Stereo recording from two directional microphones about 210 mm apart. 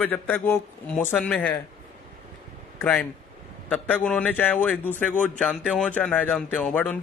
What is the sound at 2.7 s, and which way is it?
Speech, 10° left (ahead or behind).